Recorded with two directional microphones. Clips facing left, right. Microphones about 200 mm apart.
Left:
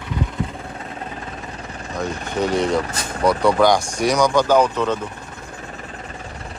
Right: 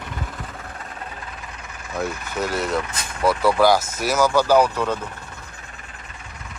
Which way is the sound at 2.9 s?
40° left (ahead or behind).